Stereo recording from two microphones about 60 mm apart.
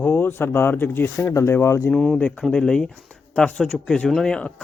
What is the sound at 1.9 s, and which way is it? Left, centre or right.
Speech, centre.